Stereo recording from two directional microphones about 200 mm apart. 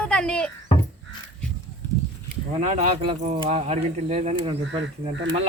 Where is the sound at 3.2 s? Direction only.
30° right (ahead or behind).